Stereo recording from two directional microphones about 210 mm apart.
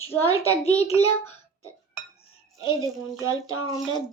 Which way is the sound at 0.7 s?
30° left (ahead or behind).